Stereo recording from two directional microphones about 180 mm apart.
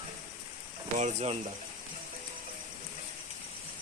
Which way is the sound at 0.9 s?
40° right (ahead or behind).